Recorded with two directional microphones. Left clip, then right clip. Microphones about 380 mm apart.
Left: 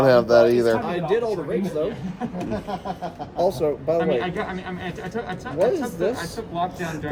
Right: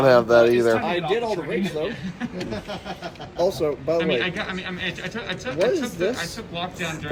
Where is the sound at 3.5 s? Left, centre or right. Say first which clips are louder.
Left 2 dB; centre.